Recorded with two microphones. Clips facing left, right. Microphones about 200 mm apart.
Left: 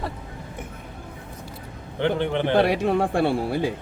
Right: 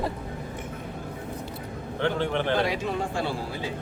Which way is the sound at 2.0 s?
20° left (ahead or behind).